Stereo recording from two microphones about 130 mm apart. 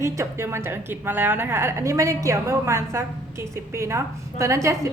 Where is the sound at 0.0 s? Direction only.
20° right (ahead or behind).